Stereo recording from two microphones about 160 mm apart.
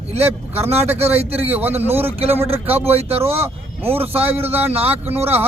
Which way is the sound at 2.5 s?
40° right (ahead or behind).